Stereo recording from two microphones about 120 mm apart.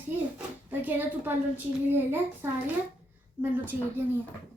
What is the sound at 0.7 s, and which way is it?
A woman's voice, 15° right (ahead or behind).